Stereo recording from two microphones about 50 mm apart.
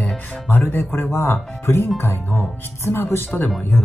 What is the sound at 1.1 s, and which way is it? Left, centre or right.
Speech, left.